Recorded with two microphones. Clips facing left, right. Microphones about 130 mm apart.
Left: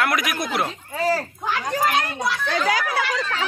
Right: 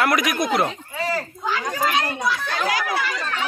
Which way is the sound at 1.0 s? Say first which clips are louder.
Left 4 dB; 40° left (ahead or behind).